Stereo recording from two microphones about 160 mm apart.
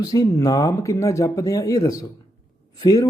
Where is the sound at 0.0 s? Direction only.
20° left (ahead or behind).